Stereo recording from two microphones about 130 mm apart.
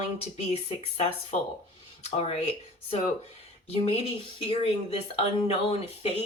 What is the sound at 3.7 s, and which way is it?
Speech, 50° left (ahead or behind).